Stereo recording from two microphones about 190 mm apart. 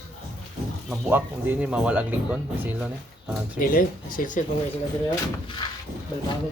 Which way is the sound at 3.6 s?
45° left (ahead or behind).